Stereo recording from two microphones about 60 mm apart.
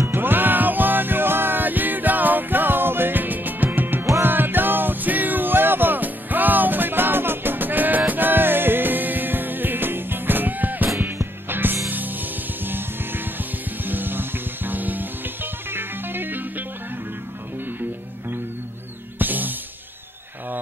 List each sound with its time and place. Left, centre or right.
0.1 s music: right
19.1 s music: right